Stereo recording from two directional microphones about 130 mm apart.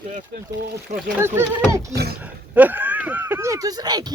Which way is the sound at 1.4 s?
20° right (ahead or behind).